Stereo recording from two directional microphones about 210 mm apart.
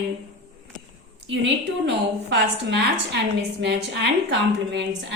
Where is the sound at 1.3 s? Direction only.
55° right (ahead or behind).